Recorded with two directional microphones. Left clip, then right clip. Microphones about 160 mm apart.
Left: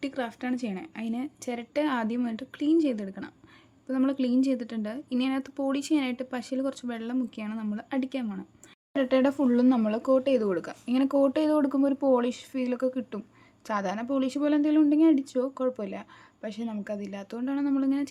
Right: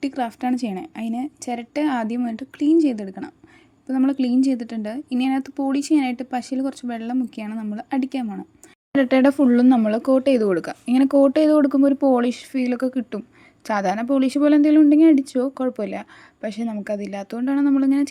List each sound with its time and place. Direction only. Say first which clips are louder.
0.0 s a woman's voice: right 8 dB; 25° right (ahead or behind)
9.0 s a woman's voice: right 7 dB; 35° right (ahead or behind)